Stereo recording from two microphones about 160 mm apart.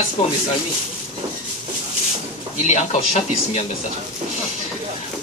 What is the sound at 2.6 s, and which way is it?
Speech, 45° left (ahead or behind).